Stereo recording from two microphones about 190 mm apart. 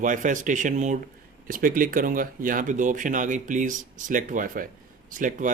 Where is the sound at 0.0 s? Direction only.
45° right (ahead or behind).